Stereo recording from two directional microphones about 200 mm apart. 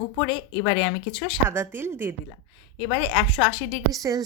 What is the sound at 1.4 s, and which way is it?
Speech, 10° right (ahead or behind).